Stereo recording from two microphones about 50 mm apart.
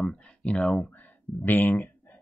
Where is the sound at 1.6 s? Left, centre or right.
Left.